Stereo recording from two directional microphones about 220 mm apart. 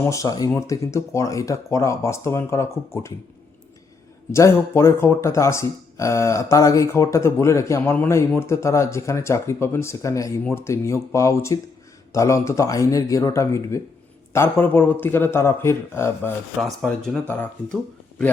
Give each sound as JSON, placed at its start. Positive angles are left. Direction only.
{"t": 0.0, "sound": "speech", "side_deg": 15}
{"t": 4.3, "sound": "speech", "side_deg": 10}
{"t": 16.6, "sound": "speech", "side_deg": 0}